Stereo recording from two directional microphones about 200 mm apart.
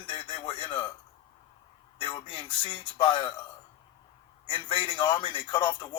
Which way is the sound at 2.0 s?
25° left (ahead or behind).